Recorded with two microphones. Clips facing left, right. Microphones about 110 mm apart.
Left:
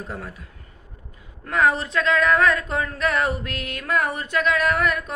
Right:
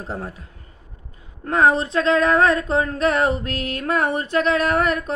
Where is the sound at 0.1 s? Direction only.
35° right (ahead or behind).